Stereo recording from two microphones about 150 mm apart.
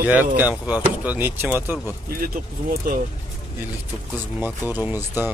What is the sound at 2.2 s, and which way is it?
Speech, 70° right (ahead or behind).